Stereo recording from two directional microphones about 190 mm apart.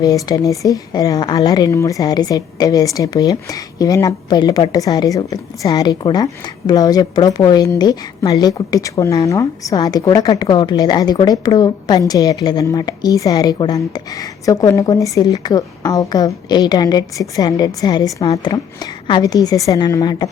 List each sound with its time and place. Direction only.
0.3 s speech: 15° left (ahead or behind)